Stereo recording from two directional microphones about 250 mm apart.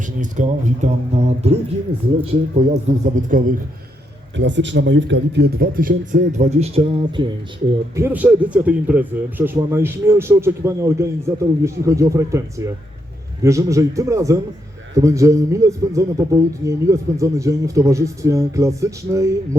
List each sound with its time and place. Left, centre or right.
0.0 s speech: right
4.4 s a man's voice: right
7.9 s a man's voice: centre